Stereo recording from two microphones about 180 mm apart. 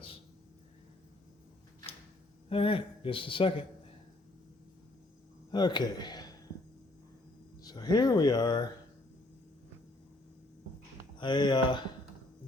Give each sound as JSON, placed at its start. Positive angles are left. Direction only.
{"t": 2.5, "sound": "a man's voice", "side_deg": 30}
{"t": 5.5, "sound": "speech", "side_deg": 25}
{"t": 7.6, "sound": "speech", "side_deg": 20}
{"t": 11.2, "sound": "a man's voice", "side_deg": 25}